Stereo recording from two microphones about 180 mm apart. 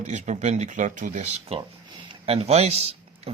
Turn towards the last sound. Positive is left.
turn(degrees=-35)  # may be behind; listen again after turning